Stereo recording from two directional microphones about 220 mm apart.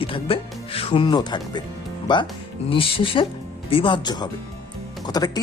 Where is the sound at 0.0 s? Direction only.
25° left (ahead or behind).